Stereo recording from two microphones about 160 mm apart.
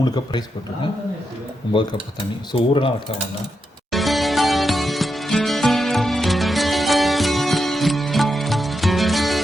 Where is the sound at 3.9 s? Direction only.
Centre (ahead or behind).